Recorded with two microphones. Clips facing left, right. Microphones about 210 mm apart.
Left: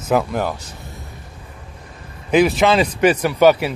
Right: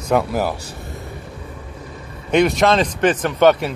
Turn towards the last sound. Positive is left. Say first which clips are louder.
# left 1 dB
turn(degrees=5)  # may be behind; listen again after turning